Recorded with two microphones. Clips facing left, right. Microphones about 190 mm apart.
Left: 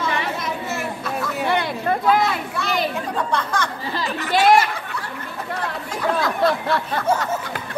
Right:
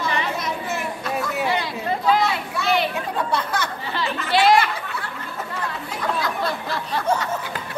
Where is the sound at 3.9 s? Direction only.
45° left (ahead or behind).